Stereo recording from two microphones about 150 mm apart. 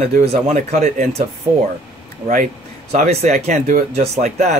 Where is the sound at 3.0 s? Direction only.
45° right (ahead or behind).